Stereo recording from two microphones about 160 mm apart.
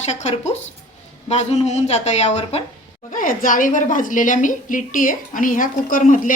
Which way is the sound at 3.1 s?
55° left (ahead or behind).